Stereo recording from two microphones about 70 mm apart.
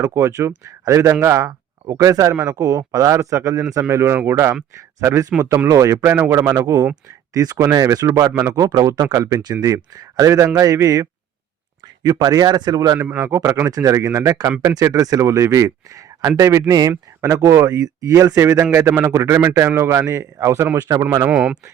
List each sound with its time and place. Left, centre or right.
0.1 s a man's voice: right
9.1 s speech: right
9.4 s speech: right
9.6 s a man's voice: right
12.0 s a man's voice: right
13.1 s a man's voice: right
20.7 s a man's voice: right
21.2 s speech: right